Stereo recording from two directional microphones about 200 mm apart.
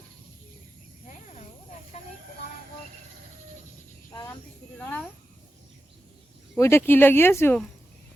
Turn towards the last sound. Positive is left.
turn(degrees=10)  # may be behind; listen again after turning